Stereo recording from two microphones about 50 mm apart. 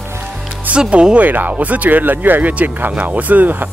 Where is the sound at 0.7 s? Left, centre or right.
Right.